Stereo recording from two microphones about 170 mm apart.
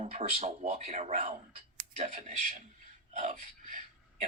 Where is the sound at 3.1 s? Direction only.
45° right (ahead or behind).